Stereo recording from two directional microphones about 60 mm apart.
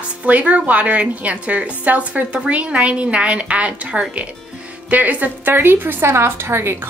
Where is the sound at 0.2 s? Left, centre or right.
Right.